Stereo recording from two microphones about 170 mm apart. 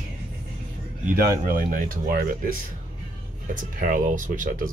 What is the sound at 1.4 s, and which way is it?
Speech, 55° right (ahead or behind).